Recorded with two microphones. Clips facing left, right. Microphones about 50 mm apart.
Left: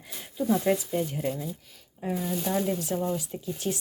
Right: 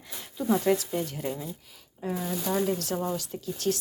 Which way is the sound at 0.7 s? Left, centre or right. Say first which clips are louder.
Right 2 dB; centre.